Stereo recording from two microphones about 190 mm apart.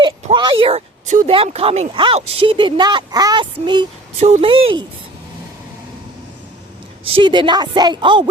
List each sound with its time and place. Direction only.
0.0 s a sound: 25° right (ahead or behind)
1.3 s speech: 30° right (ahead or behind)
7.1 s speech: 25° right (ahead or behind)